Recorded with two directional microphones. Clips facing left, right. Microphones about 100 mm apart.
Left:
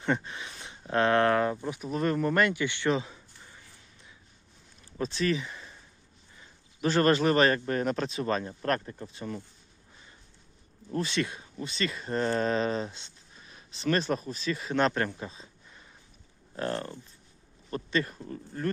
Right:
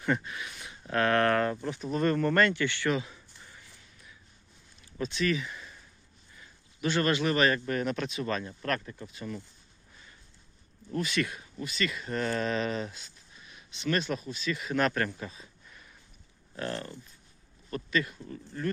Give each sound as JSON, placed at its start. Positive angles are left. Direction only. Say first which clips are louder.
{"t": 0.0, "sound": "speech", "louder": "left 1 dB", "side_deg": 30}
{"t": 1.6, "sound": "speech", "louder": "right 1 dB", "side_deg": 5}
{"t": 4.9, "sound": "speech", "louder": "left 1 dB", "side_deg": 35}
{"t": 10.9, "sound": "speech", "louder": "left 1 dB", "side_deg": 30}